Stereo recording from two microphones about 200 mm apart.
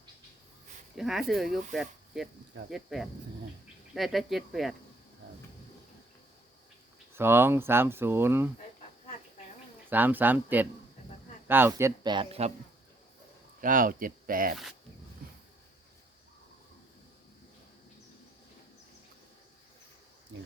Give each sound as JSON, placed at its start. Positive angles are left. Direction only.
{"t": 0.9, "sound": "speech", "side_deg": 0}
{"t": 7.1, "sound": "speech", "side_deg": -10}
{"t": 9.9, "sound": "a man's voice", "side_deg": -10}
{"t": 13.6, "sound": "speech", "side_deg": -45}
{"t": 20.3, "sound": "a sound", "side_deg": -65}